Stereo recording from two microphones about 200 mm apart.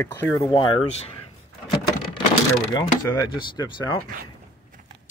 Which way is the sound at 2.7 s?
15° left (ahead or behind).